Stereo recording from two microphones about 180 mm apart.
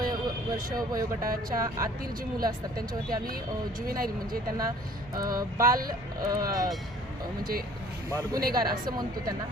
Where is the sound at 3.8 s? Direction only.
55° right (ahead or behind).